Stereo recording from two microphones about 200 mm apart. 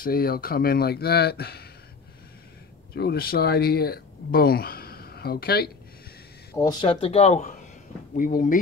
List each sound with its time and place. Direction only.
0.0 s speech: 50° left (ahead or behind)
2.9 s speech: 50° left (ahead or behind)
6.5 s speech: 20° left (ahead or behind); by 8.5 s 40° left (ahead or behind)